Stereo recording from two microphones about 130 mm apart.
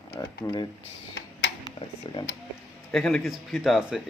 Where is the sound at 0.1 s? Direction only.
30° left (ahead or behind).